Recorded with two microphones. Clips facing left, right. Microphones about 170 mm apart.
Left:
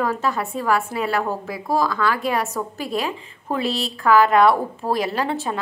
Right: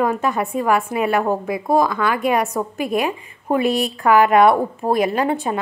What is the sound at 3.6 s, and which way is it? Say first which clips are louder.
Speech: right 5 dB; 55° right (ahead or behind).